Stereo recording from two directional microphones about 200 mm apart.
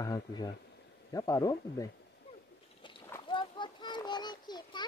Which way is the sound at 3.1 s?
20° left (ahead or behind).